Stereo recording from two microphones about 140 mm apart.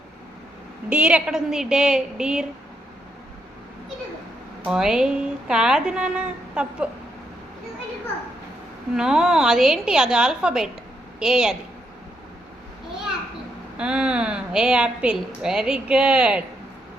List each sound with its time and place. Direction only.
0.9 s a woman's voice: 5° right (ahead or behind)
4.6 s a woman's voice: 5° right (ahead or behind)
9.0 s a woman's voice: 5° right (ahead or behind)
13.7 s a woman's voice: 5° right (ahead or behind)